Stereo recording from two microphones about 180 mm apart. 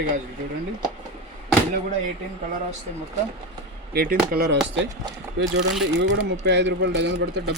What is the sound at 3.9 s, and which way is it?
Speech, 60° right (ahead or behind).